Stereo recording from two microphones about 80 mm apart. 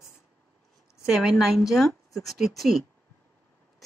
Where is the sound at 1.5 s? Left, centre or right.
Centre.